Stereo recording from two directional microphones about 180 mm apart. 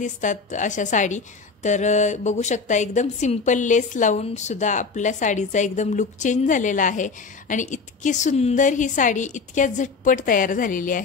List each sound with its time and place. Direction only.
0.0 s a woman's voice: 45° left (ahead or behind)